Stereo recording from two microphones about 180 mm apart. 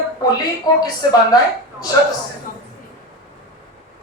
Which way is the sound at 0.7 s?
20° left (ahead or behind).